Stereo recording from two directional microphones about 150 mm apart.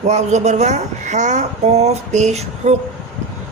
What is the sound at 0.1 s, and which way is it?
Speech, 50° right (ahead or behind).